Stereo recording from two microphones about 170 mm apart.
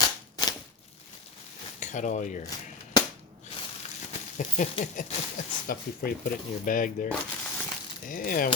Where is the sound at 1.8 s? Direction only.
45° left (ahead or behind).